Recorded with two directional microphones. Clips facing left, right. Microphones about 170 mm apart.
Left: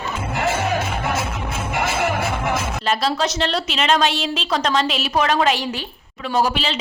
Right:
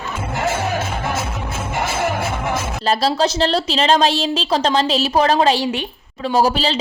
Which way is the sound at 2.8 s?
35° right (ahead or behind).